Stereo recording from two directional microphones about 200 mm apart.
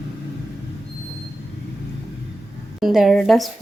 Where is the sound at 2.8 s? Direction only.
Centre (ahead or behind).